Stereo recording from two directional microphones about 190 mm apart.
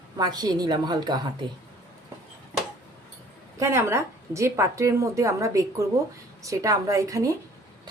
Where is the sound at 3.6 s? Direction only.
15° right (ahead or behind).